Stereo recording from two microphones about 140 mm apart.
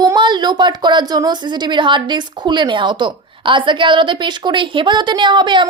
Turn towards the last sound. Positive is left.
turn(degrees=-35)  # may be behind; listen again after turning